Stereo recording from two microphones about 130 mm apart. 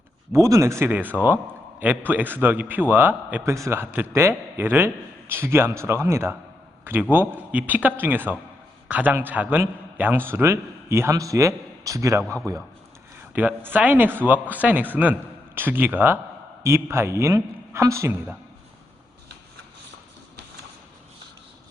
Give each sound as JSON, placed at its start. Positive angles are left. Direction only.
{"t": 0.3, "sound": "a man's voice", "side_deg": -25}
{"t": 13.3, "sound": "a man's voice", "side_deg": -15}